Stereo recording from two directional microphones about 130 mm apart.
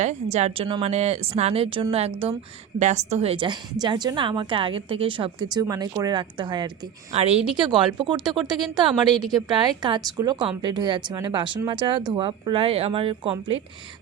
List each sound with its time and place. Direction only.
0.0 s a woman's voice: 60° right (ahead or behind)
2.7 s a woman's voice: 60° right (ahead or behind); by 6.7 s 35° right (ahead or behind)
7.1 s a woman's voice: 50° right (ahead or behind)
7.5 s a woman's voice: 35° right (ahead or behind)
9.1 s a woman's voice: centre (ahead or behind)
9.5 s a woman's voice: 35° right (ahead or behind)